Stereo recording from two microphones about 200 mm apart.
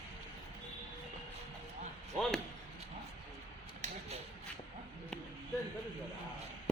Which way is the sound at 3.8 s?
35° right (ahead or behind).